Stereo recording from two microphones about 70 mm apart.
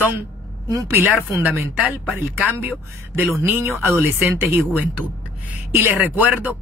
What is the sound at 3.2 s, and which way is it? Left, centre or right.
Speech, right.